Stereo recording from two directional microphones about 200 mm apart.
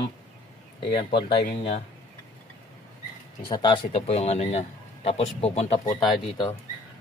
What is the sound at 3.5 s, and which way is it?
Speech, 25° left (ahead or behind).